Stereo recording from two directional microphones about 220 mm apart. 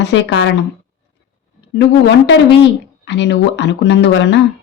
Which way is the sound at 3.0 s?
50° left (ahead or behind).